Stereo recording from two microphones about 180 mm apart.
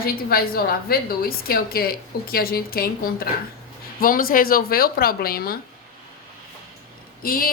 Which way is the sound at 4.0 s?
55° left (ahead or behind).